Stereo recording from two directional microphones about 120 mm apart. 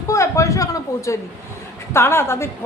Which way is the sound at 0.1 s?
25° left (ahead or behind).